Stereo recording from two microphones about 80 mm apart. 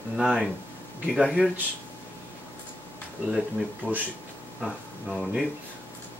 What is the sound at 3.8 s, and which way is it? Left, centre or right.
Speech, right.